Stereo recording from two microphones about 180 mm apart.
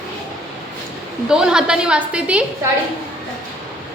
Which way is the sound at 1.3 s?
5° right (ahead or behind).